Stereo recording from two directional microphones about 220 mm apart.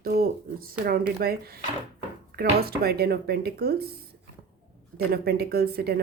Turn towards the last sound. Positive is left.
turn(degrees=-45)  # may be behind; listen again after turning